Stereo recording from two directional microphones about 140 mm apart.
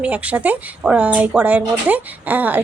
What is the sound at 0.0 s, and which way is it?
Mantra, 10° right (ahead or behind).